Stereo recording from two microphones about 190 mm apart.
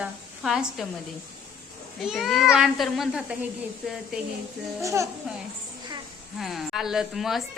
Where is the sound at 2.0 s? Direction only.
Centre (ahead or behind).